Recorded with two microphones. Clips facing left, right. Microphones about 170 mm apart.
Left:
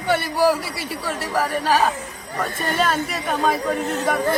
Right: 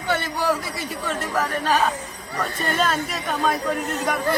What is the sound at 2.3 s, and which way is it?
Speech, 20° left (ahead or behind).